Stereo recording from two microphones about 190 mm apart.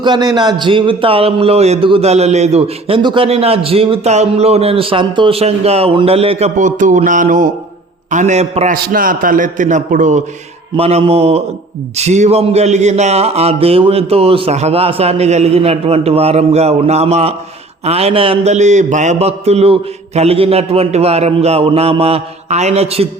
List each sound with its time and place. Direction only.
0.0 s speech: 20° right (ahead or behind)
8.7 s a man's voice: 45° right (ahead or behind); by 23.0 s 30° right (ahead or behind)